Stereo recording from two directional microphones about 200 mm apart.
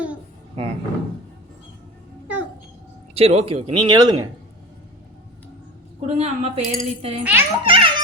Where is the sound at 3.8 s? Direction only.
20° right (ahead or behind).